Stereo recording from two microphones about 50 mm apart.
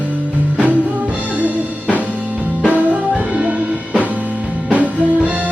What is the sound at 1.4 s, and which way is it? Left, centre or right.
Music, right.